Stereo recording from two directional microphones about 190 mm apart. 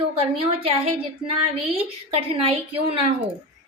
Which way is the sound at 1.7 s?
30° right (ahead or behind).